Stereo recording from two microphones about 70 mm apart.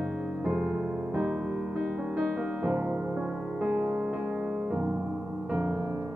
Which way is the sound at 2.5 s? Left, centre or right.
Right.